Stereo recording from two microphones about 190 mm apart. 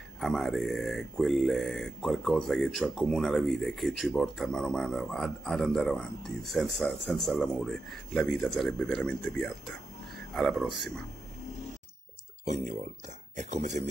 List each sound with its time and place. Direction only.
0.2 s speech: centre (ahead or behind)
12.4 s speech: 40° right (ahead or behind)